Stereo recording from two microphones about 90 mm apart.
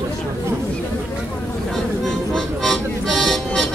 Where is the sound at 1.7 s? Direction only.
5° left (ahead or behind).